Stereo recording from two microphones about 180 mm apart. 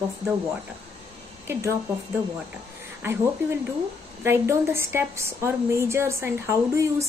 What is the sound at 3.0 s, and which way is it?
Speech, 15° right (ahead or behind).